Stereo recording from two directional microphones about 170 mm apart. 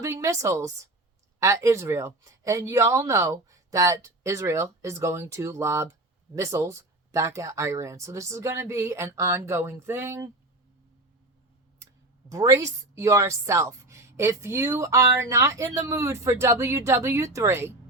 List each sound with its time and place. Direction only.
0.0 s a woman's voice: 15° right (ahead or behind)
12.3 s a woman's voice: 15° right (ahead or behind)